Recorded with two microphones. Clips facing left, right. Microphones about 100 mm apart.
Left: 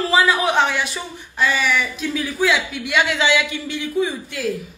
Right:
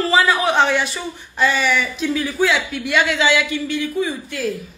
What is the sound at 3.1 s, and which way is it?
A woman's voice, 20° left (ahead or behind).